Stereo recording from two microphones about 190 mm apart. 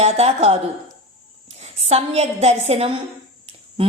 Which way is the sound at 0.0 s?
35° right (ahead or behind).